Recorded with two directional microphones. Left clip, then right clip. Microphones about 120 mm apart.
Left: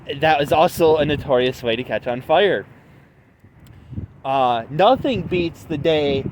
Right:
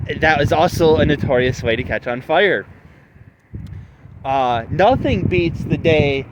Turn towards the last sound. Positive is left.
turn(degrees=-25)  # may be behind; listen again after turning